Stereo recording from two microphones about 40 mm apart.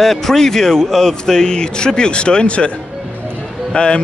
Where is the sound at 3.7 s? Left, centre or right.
Left.